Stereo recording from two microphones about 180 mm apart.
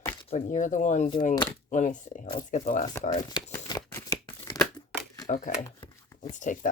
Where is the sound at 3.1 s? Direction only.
20° left (ahead or behind).